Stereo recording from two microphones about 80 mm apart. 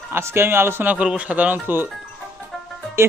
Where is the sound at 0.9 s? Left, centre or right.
Centre.